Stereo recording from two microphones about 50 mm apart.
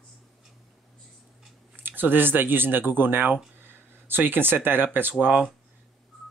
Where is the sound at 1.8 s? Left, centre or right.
Right.